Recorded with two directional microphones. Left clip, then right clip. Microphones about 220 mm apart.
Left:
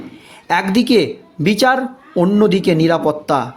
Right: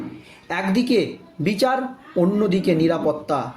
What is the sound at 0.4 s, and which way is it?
Speech, 40° left (ahead or behind).